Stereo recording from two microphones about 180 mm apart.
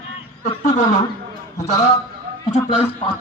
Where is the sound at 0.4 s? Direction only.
40° left (ahead or behind).